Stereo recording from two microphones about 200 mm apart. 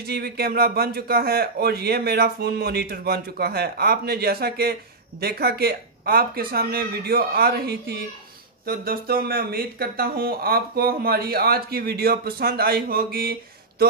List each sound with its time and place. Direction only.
0.0 s speech: 50° right (ahead or behind)